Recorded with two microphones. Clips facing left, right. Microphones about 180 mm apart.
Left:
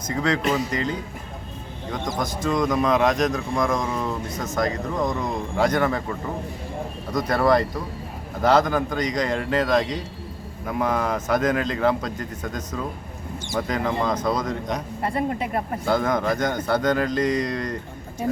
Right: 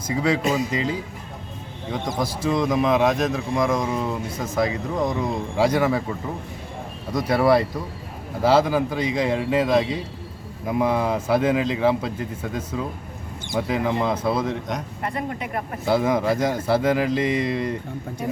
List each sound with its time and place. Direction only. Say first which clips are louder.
0.1 s a man's voice: right 1 dB; 10° right (ahead or behind)
2.1 s a man's voice: right 1 dB; 5° right (ahead or behind)
15.0 s speech: left 5 dB; 30° left (ahead or behind)
15.9 s a man's voice: right 2 dB; 5° right (ahead or behind)